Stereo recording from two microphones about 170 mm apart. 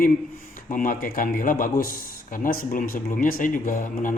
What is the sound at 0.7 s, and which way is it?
Speech, 55° left (ahead or behind).